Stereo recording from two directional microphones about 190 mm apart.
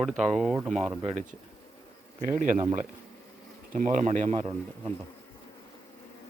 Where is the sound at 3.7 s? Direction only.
40° right (ahead or behind).